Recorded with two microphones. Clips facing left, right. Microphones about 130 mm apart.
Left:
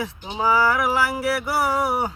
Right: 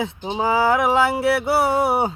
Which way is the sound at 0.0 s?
25° right (ahead or behind).